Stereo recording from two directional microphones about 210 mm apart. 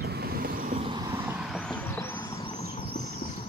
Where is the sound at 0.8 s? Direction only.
20° right (ahead or behind).